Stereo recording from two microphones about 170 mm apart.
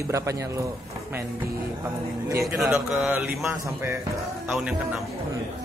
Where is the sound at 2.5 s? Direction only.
Centre (ahead or behind).